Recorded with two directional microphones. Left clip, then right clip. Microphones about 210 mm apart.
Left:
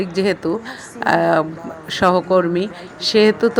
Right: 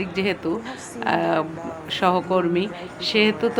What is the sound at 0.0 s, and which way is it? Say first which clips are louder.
Speech: left 5 dB; 25° left (ahead or behind).